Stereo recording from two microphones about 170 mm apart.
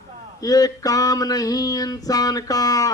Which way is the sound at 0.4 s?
20° left (ahead or behind).